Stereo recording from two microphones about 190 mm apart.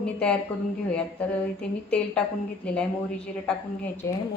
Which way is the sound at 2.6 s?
5° left (ahead or behind).